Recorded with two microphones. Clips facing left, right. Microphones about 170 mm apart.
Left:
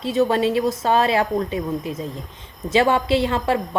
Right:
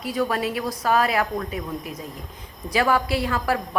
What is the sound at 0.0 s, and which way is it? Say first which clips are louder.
A woman's voice: left 6 dB; 25° left (ahead or behind).